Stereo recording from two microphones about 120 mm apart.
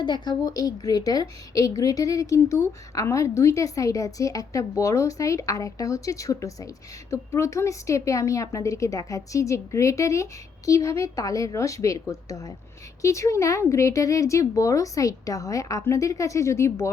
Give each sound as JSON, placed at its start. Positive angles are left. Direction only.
{"t": 0.0, "sound": "a woman's voice", "side_deg": 35}